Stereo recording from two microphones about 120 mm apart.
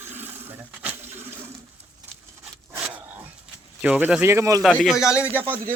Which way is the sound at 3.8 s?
15° right (ahead or behind).